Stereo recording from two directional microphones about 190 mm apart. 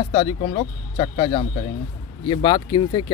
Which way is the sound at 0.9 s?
30° left (ahead or behind).